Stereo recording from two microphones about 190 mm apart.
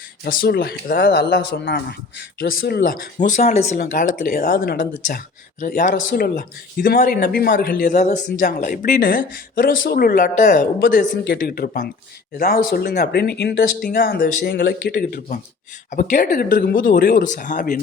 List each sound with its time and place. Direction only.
0.3 s speech: 55° left (ahead or behind)
3.2 s speech: 40° left (ahead or behind)